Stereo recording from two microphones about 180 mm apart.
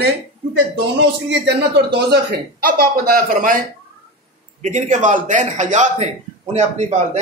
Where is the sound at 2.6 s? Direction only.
55° right (ahead or behind).